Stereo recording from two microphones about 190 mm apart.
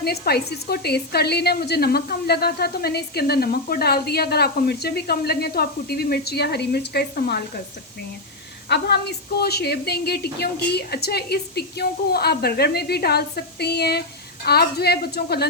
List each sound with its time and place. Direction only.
0.0 s a woman's voice: 55° left (ahead or behind)
8.7 s a woman's voice: 60° left (ahead or behind)